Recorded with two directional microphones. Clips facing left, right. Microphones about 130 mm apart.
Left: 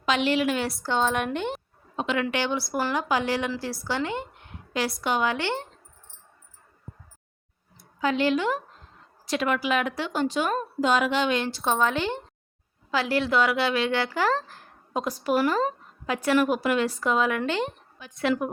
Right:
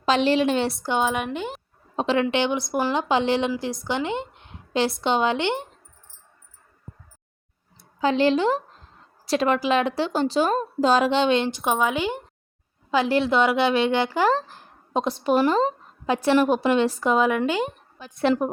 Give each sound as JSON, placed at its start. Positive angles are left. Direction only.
{"t": 0.0, "sound": "a woman's voice", "side_deg": -35}
{"t": 0.8, "sound": "speech", "side_deg": -15}
{"t": 1.1, "sound": "a woman's voice", "side_deg": -5}
{"t": 2.0, "sound": "a woman's voice", "side_deg": -35}
{"t": 2.2, "sound": "a woman's voice", "side_deg": -20}
{"t": 8.0, "sound": "a woman's voice", "side_deg": -30}
{"t": 12.9, "sound": "a woman's voice", "side_deg": -20}
{"t": 18.0, "sound": "a woman's voice", "side_deg": -35}